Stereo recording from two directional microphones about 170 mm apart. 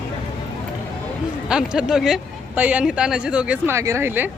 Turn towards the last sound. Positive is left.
turn(degrees=-10)  # may be behind; listen again after turning